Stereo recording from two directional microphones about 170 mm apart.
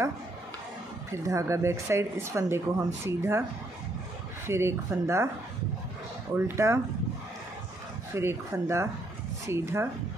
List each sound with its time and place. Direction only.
1.1 s speech: 15° right (ahead or behind)
4.5 s speech: 15° right (ahead or behind)
6.3 s speech: 15° right (ahead or behind)
8.1 s speech: 15° right (ahead or behind)